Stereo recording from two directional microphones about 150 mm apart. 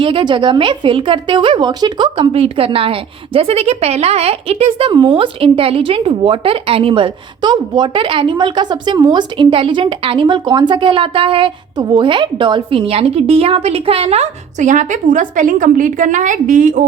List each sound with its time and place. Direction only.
0.0 s speech: 35° right (ahead or behind)
4.9 s speech: 30° right (ahead or behind); by 16.8 s 55° right (ahead or behind)